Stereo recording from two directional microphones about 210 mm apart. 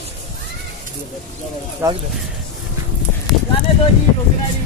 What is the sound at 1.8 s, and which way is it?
Speech, 15° right (ahead or behind).